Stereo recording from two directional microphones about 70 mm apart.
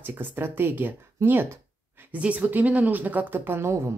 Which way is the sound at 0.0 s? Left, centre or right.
Right.